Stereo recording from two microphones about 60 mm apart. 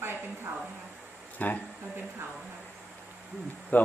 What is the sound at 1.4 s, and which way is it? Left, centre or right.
Speech, left.